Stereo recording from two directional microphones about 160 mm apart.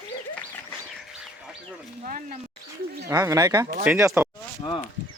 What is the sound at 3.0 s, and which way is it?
Speech, 20° right (ahead or behind).